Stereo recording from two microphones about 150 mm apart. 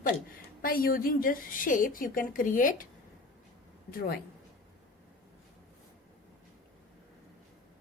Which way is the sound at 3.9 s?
90° left.